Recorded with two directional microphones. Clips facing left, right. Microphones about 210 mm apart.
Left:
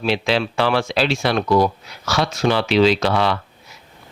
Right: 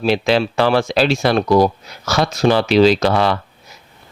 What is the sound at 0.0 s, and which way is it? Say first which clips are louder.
Speech: right 4 dB; 45° right (ahead or behind).